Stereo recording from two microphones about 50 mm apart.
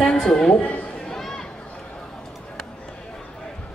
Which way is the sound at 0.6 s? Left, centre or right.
Left.